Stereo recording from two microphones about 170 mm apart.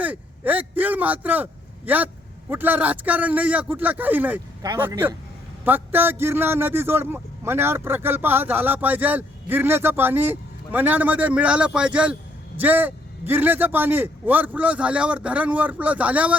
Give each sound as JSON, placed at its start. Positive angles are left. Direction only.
{"t": 0.0, "sound": "a man's voice", "side_deg": -10}